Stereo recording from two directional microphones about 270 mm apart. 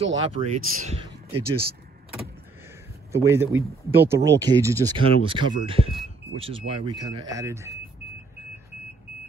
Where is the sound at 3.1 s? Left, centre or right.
Centre.